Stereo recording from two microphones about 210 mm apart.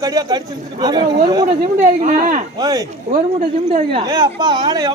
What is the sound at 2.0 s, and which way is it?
Speech, 40° right (ahead or behind).